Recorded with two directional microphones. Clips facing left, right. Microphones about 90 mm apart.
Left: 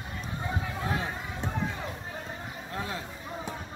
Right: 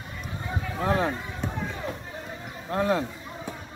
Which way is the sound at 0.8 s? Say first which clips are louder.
Right 9 dB; 45° right (ahead or behind).